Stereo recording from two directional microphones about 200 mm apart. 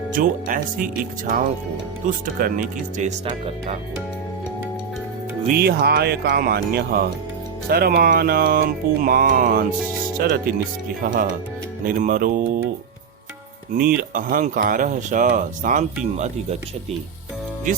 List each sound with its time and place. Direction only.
0.1 s speech: 40° right (ahead or behind)
5.5 s speech: 50° right (ahead or behind)
13.7 s speech: 45° right (ahead or behind)